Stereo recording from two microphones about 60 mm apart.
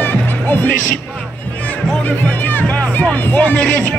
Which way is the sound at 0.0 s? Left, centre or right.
Left.